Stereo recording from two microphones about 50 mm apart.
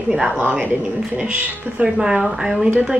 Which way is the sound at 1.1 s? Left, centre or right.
Right.